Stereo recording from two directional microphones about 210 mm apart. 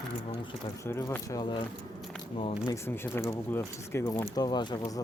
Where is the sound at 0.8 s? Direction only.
10° left (ahead or behind).